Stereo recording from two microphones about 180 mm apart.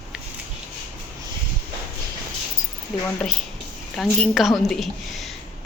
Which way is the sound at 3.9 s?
Centre (ahead or behind).